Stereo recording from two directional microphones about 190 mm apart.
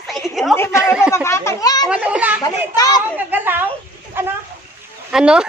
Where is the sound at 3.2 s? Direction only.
10° right (ahead or behind).